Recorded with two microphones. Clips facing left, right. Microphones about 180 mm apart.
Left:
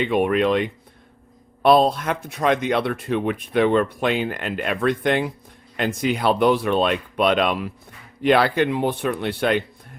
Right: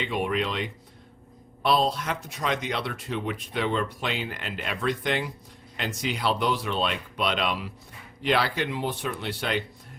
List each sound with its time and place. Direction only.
0.0 s speech: 55° left (ahead or behind)